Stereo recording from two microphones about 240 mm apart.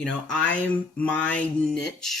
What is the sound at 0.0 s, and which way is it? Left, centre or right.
Speech, centre.